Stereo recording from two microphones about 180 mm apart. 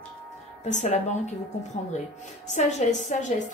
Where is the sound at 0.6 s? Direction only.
40° left (ahead or behind).